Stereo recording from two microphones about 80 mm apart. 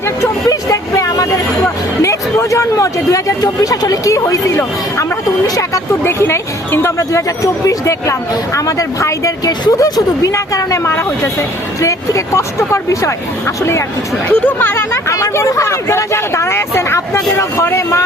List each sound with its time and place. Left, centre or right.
0.4 s vehicle: left
2.0 s speech: left
6.0 s speech: left
14.3 s speech: left